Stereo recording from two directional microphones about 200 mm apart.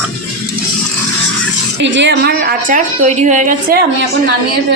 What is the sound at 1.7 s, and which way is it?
A woman's voice, 65° right (ahead or behind).